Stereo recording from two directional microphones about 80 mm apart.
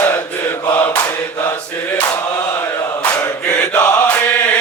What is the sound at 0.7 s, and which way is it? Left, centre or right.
Mantra, left.